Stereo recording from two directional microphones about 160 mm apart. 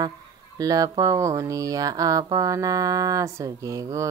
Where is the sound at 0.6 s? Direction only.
20° right (ahead or behind).